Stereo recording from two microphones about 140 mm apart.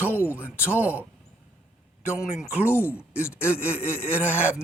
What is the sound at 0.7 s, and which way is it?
Speech, 10° right (ahead or behind).